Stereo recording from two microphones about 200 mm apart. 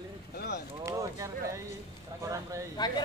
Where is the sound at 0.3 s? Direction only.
50° left (ahead or behind).